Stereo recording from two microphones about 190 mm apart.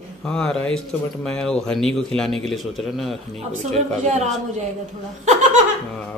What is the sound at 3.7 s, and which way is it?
Speech, 35° right (ahead or behind).